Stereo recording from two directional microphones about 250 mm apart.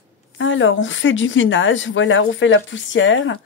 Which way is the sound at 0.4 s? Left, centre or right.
Left.